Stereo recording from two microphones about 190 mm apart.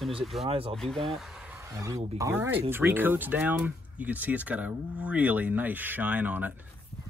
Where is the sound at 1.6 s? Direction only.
15° right (ahead or behind).